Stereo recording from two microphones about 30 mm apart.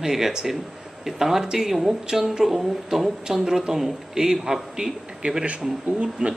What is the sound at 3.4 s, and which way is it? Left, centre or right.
Speech, right.